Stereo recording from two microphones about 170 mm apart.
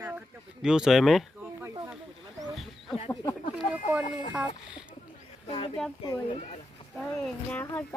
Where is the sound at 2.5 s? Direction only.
Centre (ahead or behind).